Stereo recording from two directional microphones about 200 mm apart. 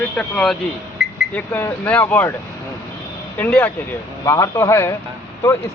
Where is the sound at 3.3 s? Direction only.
10° left (ahead or behind).